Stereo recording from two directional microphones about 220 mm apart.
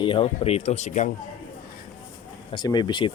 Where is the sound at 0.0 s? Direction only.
25° left (ahead or behind).